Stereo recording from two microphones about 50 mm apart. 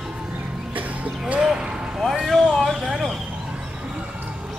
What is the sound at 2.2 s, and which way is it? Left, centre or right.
Speech, centre.